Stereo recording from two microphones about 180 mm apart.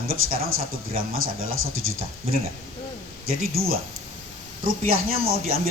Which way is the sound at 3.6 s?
55° right (ahead or behind).